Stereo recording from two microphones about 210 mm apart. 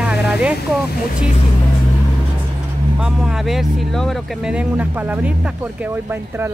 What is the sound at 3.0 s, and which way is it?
Speech, centre (ahead or behind).